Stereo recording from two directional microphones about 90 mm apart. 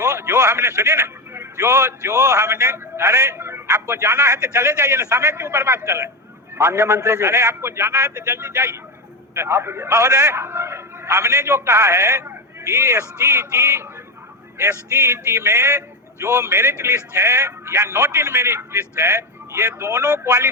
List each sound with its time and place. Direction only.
0.0 s a man's voice: 30° right (ahead or behind)